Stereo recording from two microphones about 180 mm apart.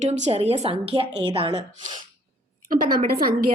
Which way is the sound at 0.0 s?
40° right (ahead or behind).